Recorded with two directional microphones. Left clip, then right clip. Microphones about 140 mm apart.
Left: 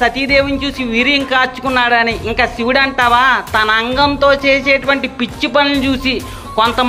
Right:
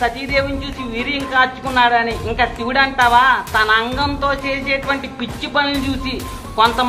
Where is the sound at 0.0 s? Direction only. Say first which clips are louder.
Left 6 dB; 45° left (ahead or behind).